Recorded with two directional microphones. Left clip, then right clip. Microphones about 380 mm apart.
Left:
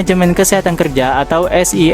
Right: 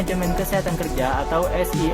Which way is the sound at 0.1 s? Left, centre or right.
Left.